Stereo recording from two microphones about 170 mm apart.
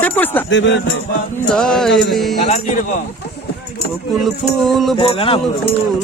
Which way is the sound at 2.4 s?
45° left (ahead or behind).